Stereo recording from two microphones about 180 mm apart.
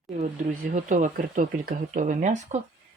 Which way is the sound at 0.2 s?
45° right (ahead or behind).